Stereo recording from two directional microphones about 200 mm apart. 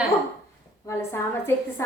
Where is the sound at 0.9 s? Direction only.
15° left (ahead or behind).